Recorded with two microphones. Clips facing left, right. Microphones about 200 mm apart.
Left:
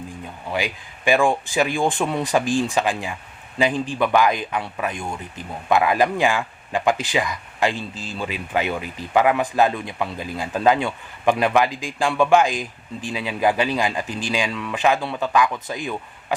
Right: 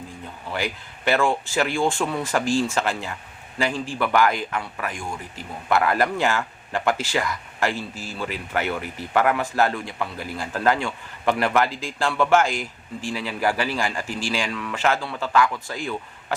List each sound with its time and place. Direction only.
0.5 s speech: 15° left (ahead or behind)